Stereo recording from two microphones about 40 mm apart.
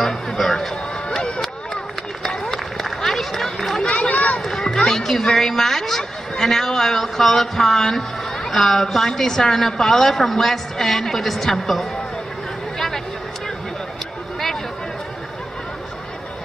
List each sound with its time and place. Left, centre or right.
0.4 s speech: centre
1.0 s music: left
2.4 s run: centre
4.1 s run: left
4.4 s a sound: centre
4.7 s a woman's voice: centre
12.7 s a sound: centre